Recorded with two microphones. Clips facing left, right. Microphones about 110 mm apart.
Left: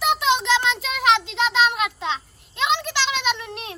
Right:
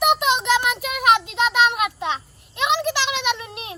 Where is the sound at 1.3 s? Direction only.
15° right (ahead or behind).